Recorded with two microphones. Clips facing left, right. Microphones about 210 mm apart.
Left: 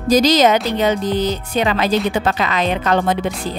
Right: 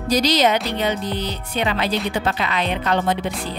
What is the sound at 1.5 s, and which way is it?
A woman's voice, 90° left.